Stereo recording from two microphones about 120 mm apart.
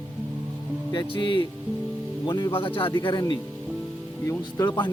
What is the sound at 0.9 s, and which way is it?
Speech, 40° left (ahead or behind).